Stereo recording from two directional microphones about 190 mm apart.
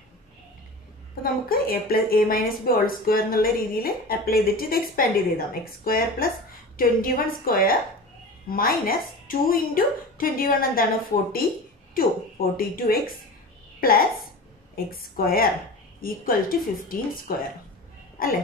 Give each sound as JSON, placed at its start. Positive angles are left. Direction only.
{"t": 1.2, "sound": "speech", "side_deg": 50}
{"t": 11.9, "sound": "a woman's voice", "side_deg": 50}
{"t": 18.2, "sound": "speech", "side_deg": 50}